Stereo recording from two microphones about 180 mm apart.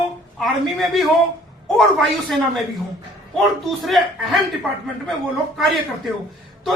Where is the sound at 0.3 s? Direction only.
Centre (ahead or behind).